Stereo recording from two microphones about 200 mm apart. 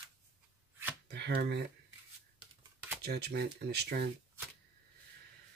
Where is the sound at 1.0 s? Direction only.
55° right (ahead or behind).